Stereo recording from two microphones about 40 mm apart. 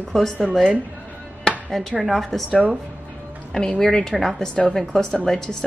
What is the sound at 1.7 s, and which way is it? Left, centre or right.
Speech, centre.